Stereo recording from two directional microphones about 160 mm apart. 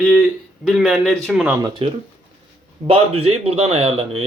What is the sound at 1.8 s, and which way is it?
Speech, 35° right (ahead or behind).